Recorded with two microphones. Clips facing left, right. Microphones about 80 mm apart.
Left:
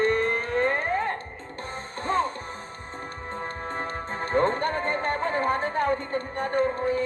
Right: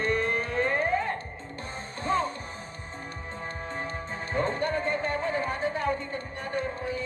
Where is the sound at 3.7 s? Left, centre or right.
Left.